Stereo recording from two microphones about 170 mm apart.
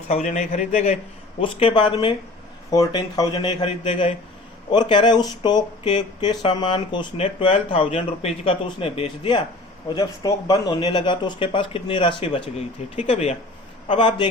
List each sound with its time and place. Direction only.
0.1 s a man's voice: 40° left (ahead or behind)